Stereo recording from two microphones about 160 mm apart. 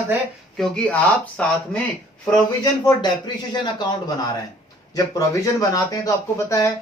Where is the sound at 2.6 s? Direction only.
25° left (ahead or behind).